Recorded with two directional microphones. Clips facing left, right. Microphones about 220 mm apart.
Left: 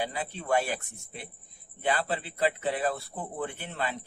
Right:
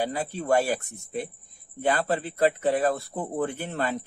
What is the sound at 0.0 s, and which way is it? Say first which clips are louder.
Speech: right 5 dB; 40° right (ahead or behind).